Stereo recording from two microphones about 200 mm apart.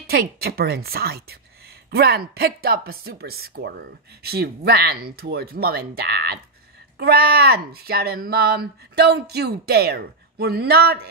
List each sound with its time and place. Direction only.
0.0 s speech: 50° right (ahead or behind)